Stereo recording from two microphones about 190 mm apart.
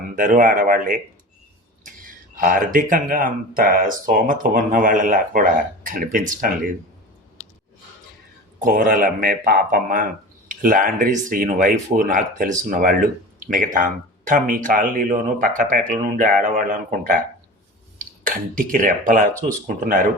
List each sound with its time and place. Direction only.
0.2 s speech: 45° right (ahead or behind)
8.6 s speech: 45° right (ahead or behind)
17.9 s speech: 45° right (ahead or behind)